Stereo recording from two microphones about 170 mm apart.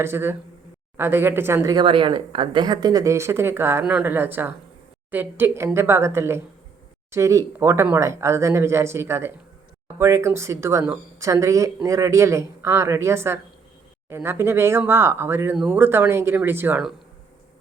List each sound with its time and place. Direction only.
0.0 s speech: 15° right (ahead or behind)